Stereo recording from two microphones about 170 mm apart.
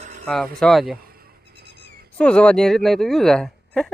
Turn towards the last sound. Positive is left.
turn(degrees=5)  # may be behind; listen again after turning